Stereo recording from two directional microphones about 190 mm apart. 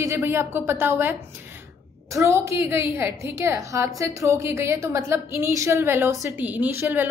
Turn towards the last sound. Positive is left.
turn(degrees=-10)  # may be behind; listen again after turning